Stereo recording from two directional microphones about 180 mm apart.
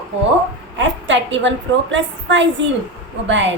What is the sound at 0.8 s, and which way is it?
A woman's voice, 90° right.